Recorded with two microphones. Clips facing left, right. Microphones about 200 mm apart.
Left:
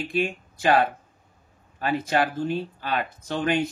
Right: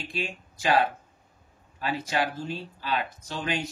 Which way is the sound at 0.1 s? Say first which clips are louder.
Left 8 dB; 55° left (ahead or behind).